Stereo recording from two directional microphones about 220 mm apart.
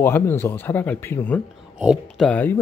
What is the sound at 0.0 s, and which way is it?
Speech, 10° left (ahead or behind).